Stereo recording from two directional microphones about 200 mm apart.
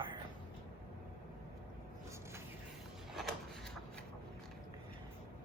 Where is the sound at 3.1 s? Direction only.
Centre (ahead or behind).